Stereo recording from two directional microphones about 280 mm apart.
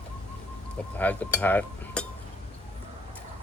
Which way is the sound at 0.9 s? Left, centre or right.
Centre.